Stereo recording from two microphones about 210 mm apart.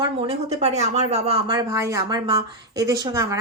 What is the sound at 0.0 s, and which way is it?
Speech, 25° right (ahead or behind).